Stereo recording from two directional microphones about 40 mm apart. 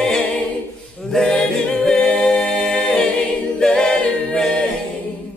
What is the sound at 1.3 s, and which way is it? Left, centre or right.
A capella, left.